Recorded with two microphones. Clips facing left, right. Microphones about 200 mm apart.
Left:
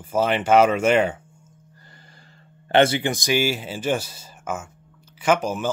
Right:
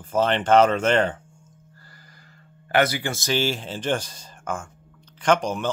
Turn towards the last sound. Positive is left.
turn(degrees=5)  # may be behind; listen again after turning